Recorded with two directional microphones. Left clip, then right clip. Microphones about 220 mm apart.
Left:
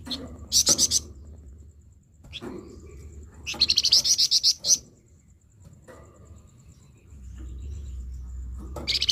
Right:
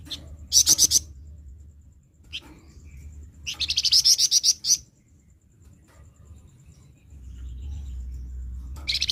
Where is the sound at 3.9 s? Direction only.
5° left (ahead or behind).